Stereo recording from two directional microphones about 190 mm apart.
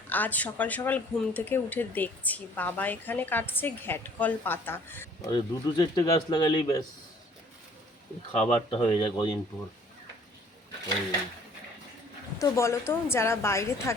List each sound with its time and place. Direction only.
0.1 s speech: 10° left (ahead or behind)
5.3 s speech: 25° left (ahead or behind)
8.4 s speech: 25° left (ahead or behind)
12.4 s speech: 15° left (ahead or behind)